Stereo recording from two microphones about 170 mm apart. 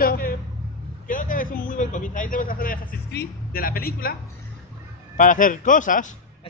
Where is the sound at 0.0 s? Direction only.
60° left (ahead or behind).